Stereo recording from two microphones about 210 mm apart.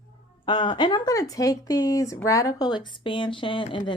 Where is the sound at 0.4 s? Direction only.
25° left (ahead or behind).